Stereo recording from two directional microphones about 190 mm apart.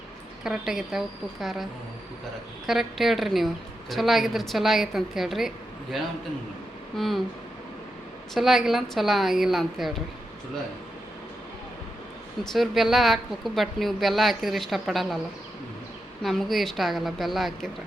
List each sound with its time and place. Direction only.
0.4 s a woman's voice: centre (ahead or behind)
2.6 s a woman's voice: centre (ahead or behind)
8.3 s a woman's voice: centre (ahead or behind)
12.4 s a woman's voice: centre (ahead or behind)
16.2 s a woman's voice: centre (ahead or behind)